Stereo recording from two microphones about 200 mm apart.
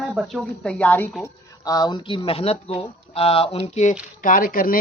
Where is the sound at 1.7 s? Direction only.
20° left (ahead or behind).